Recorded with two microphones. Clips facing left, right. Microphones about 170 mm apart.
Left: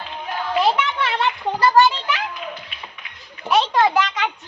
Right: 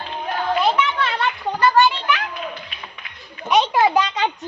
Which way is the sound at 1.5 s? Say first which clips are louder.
Left 1 dB; 35° left (ahead or behind).